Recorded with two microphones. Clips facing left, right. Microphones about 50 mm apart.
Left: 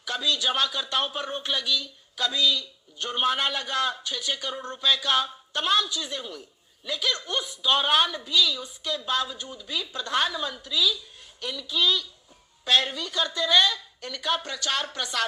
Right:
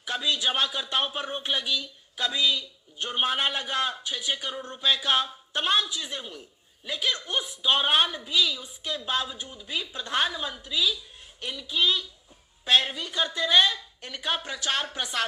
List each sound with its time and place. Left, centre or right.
0.0 s speech: centre